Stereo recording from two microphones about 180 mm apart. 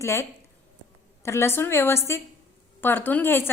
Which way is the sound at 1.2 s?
15° left (ahead or behind).